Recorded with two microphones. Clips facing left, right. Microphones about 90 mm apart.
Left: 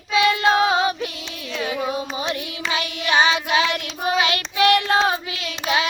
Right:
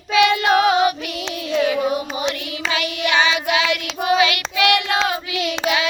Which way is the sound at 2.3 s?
30° left (ahead or behind).